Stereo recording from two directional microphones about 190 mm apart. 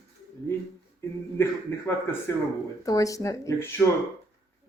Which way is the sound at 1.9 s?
15° left (ahead or behind).